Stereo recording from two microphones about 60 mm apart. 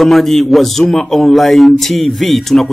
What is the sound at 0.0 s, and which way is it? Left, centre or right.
A man's voice, centre.